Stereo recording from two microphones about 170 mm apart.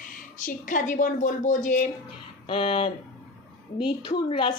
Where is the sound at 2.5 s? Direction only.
30° left (ahead or behind).